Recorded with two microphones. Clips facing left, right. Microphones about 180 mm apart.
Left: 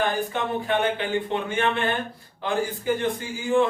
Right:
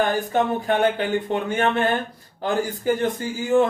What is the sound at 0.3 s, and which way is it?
Speech, 40° right (ahead or behind).